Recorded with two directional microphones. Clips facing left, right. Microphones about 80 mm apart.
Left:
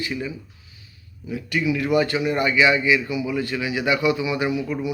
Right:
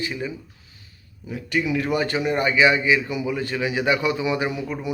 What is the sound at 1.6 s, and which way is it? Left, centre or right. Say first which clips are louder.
Speech: left 5 dB; right.